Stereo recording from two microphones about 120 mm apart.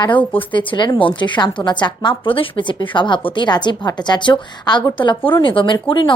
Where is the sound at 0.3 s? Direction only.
45° left (ahead or behind).